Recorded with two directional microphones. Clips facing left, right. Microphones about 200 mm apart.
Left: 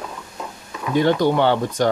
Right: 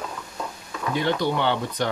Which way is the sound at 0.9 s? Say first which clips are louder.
Left 7 dB; 45° left (ahead or behind).